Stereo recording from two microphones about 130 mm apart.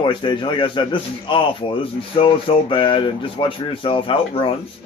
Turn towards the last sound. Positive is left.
turn(degrees=45)  # may be behind; listen again after turning